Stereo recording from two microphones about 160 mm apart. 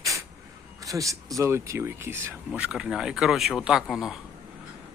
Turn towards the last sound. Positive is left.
turn(degrees=-5)  # may be behind; listen again after turning